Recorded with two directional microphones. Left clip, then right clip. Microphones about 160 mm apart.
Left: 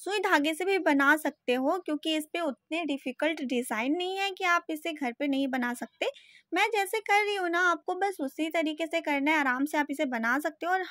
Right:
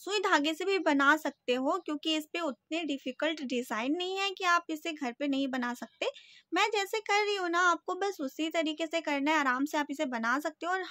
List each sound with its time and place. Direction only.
0.0 s speech: 20° left (ahead or behind)